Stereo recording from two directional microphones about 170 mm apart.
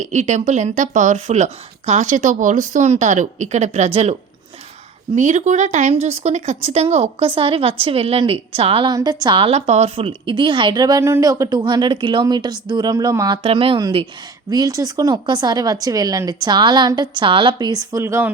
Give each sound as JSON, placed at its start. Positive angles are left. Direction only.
{"t": 0.0, "sound": "a woman's voice", "side_deg": -45}